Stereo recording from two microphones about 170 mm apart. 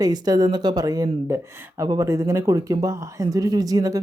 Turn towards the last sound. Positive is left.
turn(degrees=-20)  # may be behind; listen again after turning